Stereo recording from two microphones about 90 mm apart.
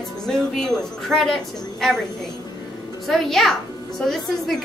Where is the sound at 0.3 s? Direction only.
5° left (ahead or behind).